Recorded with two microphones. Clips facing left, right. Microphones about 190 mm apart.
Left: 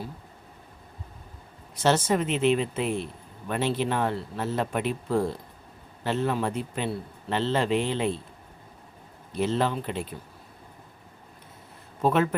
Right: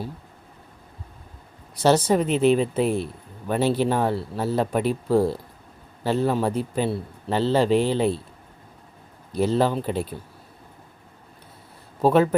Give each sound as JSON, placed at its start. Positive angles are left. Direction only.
{"t": 1.7, "sound": "a man's voice", "side_deg": -35}
{"t": 9.3, "sound": "a man's voice", "side_deg": -35}
{"t": 12.0, "sound": "a man's voice", "side_deg": -35}